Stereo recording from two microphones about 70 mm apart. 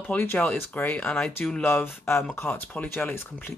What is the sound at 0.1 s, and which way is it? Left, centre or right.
Speech, left.